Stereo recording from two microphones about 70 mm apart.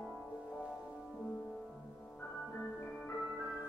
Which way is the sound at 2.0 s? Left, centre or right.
Left.